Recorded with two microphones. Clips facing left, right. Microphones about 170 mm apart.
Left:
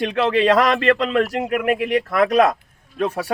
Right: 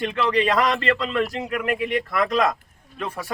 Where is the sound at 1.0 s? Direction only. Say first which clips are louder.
Left 5 dB; 60° left (ahead or behind).